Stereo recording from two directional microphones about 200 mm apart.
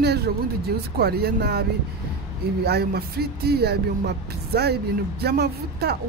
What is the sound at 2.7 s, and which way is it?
Speech, 50° right (ahead or behind).